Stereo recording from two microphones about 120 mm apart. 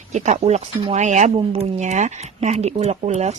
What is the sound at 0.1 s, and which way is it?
Speech, 75° right (ahead or behind).